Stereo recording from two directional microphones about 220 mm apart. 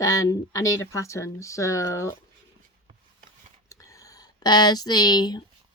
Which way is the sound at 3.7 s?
15° left (ahead or behind).